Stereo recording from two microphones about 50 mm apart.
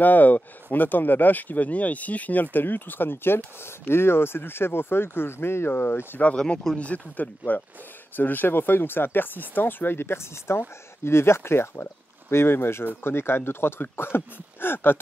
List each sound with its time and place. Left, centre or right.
0.0 s speech: left
6.2 s speech: left
6.8 s speech: left